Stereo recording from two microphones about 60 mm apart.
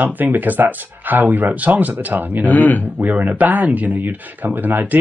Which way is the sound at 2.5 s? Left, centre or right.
Left.